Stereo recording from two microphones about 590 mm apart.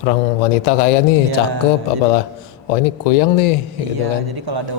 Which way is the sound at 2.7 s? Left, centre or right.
Left.